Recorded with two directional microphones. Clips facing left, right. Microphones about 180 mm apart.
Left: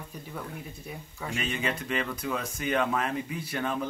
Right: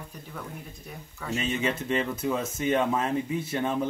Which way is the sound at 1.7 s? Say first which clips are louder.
Right 3 dB; 25° right (ahead or behind).